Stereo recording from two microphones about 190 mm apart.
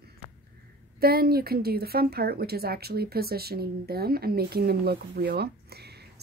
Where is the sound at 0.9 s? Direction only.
50° right (ahead or behind).